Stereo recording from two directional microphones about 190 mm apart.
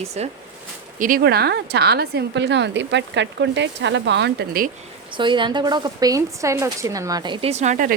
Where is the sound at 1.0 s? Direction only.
50° right (ahead or behind).